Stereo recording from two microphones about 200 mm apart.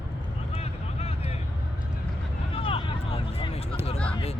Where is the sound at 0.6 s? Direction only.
30° left (ahead or behind).